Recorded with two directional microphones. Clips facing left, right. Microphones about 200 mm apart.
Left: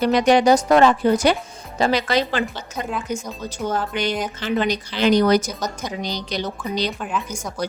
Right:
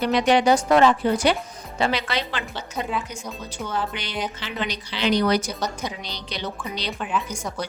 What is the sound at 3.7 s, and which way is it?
A woman's voice, 45° left (ahead or behind).